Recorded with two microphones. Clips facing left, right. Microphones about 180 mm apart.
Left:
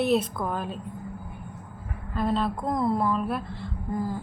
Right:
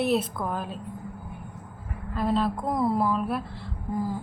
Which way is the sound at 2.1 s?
5° right (ahead or behind).